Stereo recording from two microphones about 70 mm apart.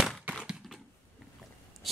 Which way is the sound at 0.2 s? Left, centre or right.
Centre.